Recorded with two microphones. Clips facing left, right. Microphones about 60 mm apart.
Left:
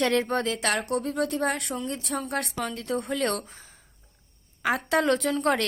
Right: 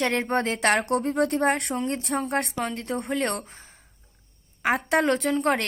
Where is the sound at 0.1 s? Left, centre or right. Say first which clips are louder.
Even; right.